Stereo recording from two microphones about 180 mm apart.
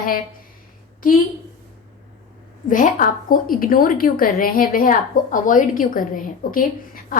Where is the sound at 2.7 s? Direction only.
50° left (ahead or behind).